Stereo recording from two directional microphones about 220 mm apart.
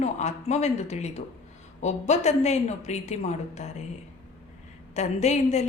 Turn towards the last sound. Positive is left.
turn(degrees=30)  # may be behind; listen again after turning